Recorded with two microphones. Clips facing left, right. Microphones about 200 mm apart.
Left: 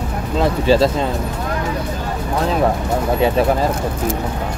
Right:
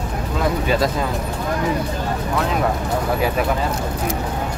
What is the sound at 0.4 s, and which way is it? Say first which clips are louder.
Speech: left 5 dB; 30° left (ahead or behind).